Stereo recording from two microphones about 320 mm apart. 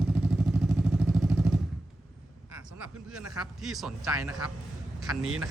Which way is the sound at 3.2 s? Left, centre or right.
Centre.